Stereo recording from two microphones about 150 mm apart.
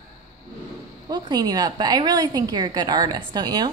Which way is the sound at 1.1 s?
25° right (ahead or behind).